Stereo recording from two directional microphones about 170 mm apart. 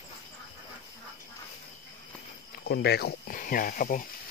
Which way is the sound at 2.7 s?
75° left (ahead or behind).